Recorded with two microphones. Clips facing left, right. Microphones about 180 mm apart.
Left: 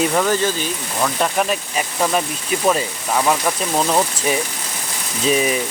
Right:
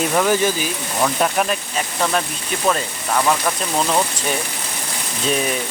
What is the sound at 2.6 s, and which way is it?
Speech, 10° left (ahead or behind).